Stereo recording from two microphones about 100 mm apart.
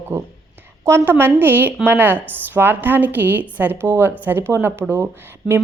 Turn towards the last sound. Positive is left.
turn(degrees=-20)  # may be behind; listen again after turning